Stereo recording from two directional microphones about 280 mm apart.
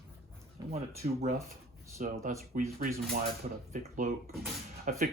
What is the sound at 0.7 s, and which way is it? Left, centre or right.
Speech, right.